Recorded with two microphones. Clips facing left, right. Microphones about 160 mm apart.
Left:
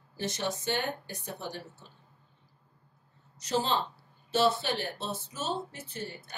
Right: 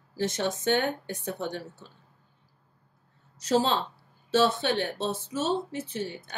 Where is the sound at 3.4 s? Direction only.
90° right.